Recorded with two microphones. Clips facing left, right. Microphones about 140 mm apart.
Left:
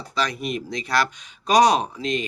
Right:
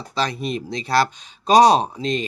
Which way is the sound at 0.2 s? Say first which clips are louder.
Right 2 dB; 30° right (ahead or behind).